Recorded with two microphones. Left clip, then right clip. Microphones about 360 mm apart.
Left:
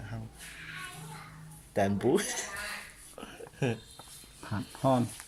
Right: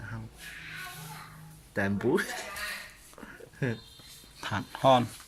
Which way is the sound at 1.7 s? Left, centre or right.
Centre.